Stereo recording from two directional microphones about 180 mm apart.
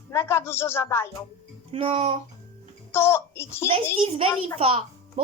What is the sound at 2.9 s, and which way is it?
Speech, 15° left (ahead or behind).